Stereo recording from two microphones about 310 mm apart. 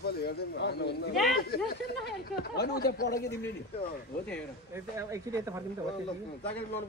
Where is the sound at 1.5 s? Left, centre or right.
Left.